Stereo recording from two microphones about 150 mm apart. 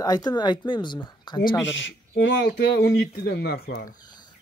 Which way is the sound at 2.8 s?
90° left.